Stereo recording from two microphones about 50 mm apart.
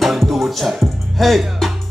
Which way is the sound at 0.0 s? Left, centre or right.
Centre.